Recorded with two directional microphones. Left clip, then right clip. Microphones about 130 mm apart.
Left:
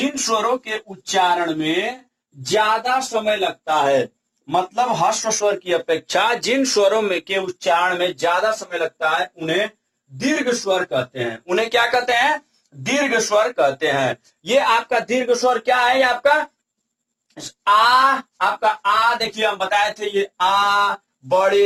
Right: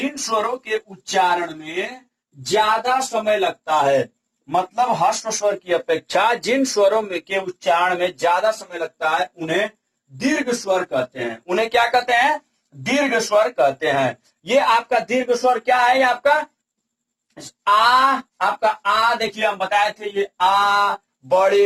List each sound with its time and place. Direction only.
0.0 s speech: 35° left (ahead or behind)
17.6 s speech: 35° left (ahead or behind)